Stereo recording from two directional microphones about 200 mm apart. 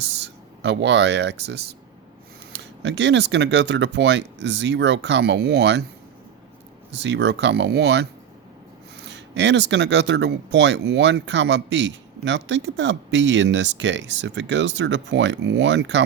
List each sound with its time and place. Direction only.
0.2 s speech: 60° right (ahead or behind)
6.9 s speech: 65° right (ahead or behind)